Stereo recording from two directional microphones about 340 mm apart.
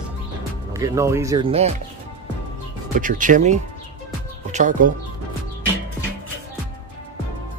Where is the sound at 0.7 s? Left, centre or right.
Centre.